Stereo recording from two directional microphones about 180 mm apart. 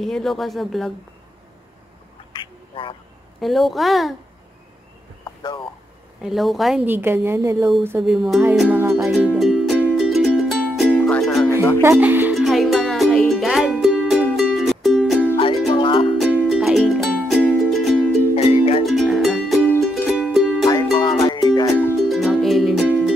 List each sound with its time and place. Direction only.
0.0 s speech: centre (ahead or behind)
2.3 s duck: 25° left (ahead or behind)
3.3 s speech: centre (ahead or behind)
5.2 s a sound: 25° left (ahead or behind)
6.2 s a woman's voice: centre (ahead or behind)
9.1 s music: 5° right (ahead or behind)
11.8 s music: 10° right (ahead or behind)
15.7 s music: 30° left (ahead or behind)
16.2 s music: 5° left (ahead or behind)
18.3 s music: 35° left (ahead or behind)
18.9 s music: centre (ahead or behind)
20.6 s music: 20° left (ahead or behind)
22.1 s music: centre (ahead or behind)